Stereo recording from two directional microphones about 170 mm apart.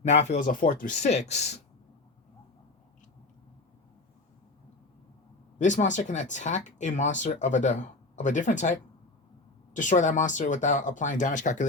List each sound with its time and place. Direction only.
0.0 s speech: 40° left (ahead or behind)
5.5 s speech: 45° left (ahead or behind)